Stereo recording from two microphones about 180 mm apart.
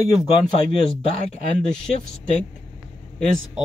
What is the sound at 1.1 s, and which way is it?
Speech, 40° left (ahead or behind).